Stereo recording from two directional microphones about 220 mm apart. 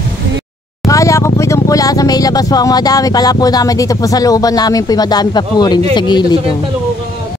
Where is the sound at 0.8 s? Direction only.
15° left (ahead or behind).